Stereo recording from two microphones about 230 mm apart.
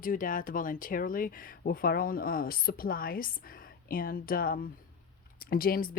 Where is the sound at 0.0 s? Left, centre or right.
Left.